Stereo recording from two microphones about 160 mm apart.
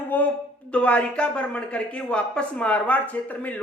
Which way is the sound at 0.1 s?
10° left (ahead or behind).